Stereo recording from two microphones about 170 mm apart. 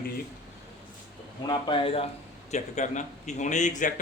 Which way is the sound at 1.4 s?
30° left (ahead or behind).